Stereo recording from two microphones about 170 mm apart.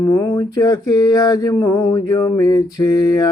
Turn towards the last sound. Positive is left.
turn(degrees=20)  # may be behind; listen again after turning